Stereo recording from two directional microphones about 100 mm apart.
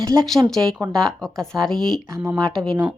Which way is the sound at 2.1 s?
30° right (ahead or behind).